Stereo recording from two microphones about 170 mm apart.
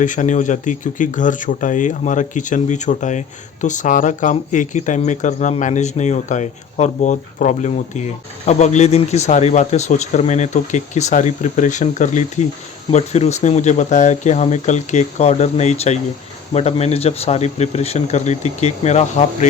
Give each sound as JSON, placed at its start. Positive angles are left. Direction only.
{"t": 0.0, "sound": "speech", "side_deg": 50}